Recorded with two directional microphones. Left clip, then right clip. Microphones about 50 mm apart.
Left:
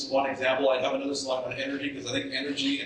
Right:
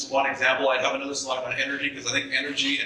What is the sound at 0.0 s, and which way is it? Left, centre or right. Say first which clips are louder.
A man's voice: right 3 dB; right.